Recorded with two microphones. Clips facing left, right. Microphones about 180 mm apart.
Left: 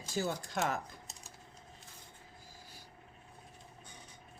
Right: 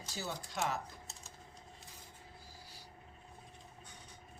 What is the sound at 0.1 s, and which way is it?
Speech, 50° left (ahead or behind).